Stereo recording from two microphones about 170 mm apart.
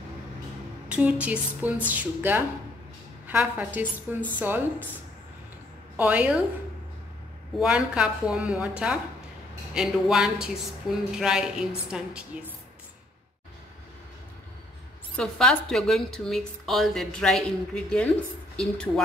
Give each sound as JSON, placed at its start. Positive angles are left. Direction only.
{"t": 0.8, "sound": "a woman's voice", "side_deg": -10}
{"t": 5.9, "sound": "a woman's voice", "side_deg": -10}
{"t": 7.5, "sound": "a woman's voice", "side_deg": -5}
{"t": 15.1, "sound": "a woman's voice", "side_deg": 5}